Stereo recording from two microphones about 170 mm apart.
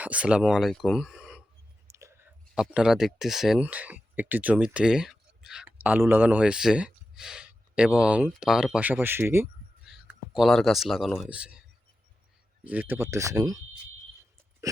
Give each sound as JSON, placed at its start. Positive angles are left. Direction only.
{"t": 0.0, "sound": "speech", "side_deg": -10}
{"t": 1.9, "sound": "whispering", "side_deg": -15}
{"t": 2.6, "sound": "speech", "side_deg": -5}
{"t": 9.8, "sound": "speech", "side_deg": -5}
{"t": 12.6, "sound": "speech", "side_deg": -10}